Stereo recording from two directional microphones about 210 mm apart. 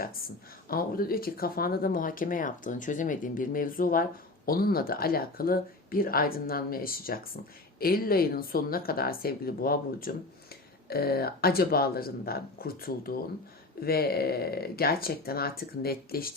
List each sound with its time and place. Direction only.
0.7 s speech: 45° left (ahead or behind)